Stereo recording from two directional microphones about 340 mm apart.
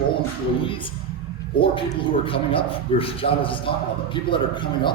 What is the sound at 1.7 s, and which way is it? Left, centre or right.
A man's voice, centre.